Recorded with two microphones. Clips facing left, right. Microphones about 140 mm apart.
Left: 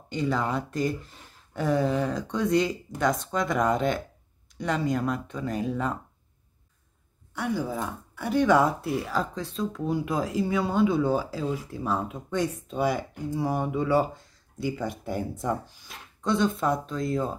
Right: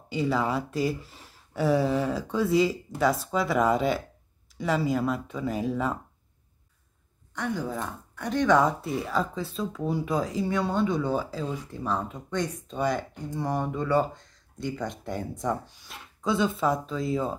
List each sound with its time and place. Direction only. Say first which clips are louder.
0.1 s speech: right 1 dB; 5° right (ahead or behind)
7.3 s speech: left 2 dB; 5° left (ahead or behind)